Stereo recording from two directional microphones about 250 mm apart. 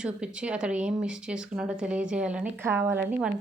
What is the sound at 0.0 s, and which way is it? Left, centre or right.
Speech, centre.